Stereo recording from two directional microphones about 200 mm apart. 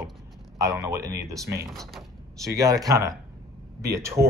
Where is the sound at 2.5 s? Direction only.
15° right (ahead or behind).